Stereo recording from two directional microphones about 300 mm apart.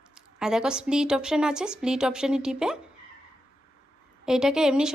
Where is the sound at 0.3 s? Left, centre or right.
Centre.